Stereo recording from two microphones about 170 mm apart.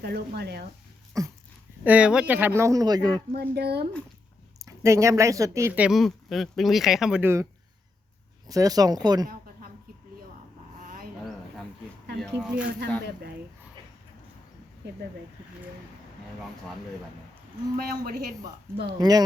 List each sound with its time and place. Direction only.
0.0 s speech: 75° right (ahead or behind)
1.2 s speech: 20° right (ahead or behind)
1.8 s speech: 10° right (ahead or behind)
3.3 s speech: 70° right (ahead or behind)
4.6 s speech: 15° right (ahead or behind)
8.4 s speech: 20° right (ahead or behind)
10.8 s a sound: 55° right (ahead or behind)
12.4 s speech: 5° right (ahead or behind)
17.7 s a woman's voice: 60° right (ahead or behind)
18.9 s speech: 20° right (ahead or behind)